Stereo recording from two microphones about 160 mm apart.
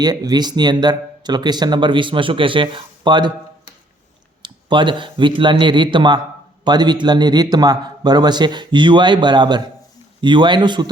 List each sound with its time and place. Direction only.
0.0 s speech: 25° right (ahead or behind)
4.4 s speech: 30° right (ahead or behind)